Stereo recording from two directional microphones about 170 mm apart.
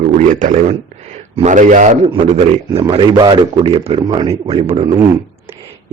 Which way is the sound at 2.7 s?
30° right (ahead or behind).